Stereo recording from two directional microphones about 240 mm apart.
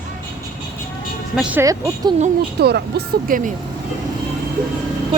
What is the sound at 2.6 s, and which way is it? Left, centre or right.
Speech, right.